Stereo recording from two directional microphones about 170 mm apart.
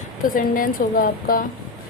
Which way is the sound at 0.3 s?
55° left (ahead or behind).